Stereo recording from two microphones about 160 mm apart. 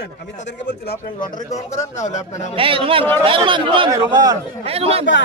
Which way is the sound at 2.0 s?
50° left (ahead or behind).